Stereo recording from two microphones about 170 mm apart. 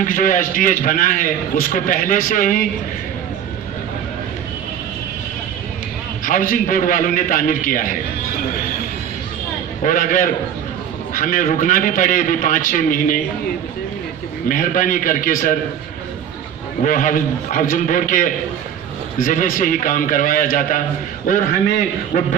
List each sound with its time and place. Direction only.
0.0 s a man's voice: 50° left (ahead or behind)
6.2 s a man's voice: 55° left (ahead or behind)
9.8 s a man's voice: 50° left (ahead or behind)
14.4 s a man's voice: 55° left (ahead or behind)
16.8 s a man's voice: 50° left (ahead or behind)